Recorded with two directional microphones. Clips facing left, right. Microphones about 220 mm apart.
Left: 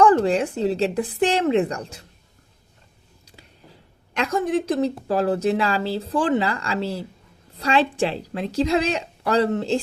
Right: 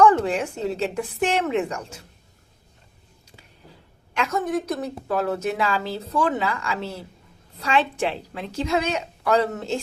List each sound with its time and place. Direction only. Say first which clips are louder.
0.0 s a woman's voice: left 2 dB; 35° left (ahead or behind)
4.1 s a woman's voice: left 2 dB; 35° left (ahead or behind)